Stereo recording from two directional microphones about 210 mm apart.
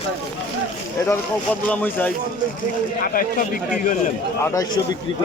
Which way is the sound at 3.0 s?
40° left (ahead or behind).